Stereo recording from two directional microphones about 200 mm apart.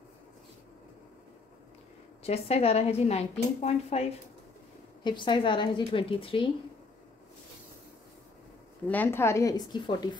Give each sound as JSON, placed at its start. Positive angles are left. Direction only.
{"t": 2.2, "sound": "a woman's voice", "side_deg": 30}
{"t": 5.0, "sound": "a woman's voice", "side_deg": 25}
{"t": 8.8, "sound": "a woman's voice", "side_deg": 10}